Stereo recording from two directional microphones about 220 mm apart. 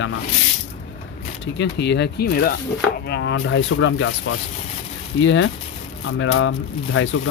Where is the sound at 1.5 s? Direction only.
50° left (ahead or behind).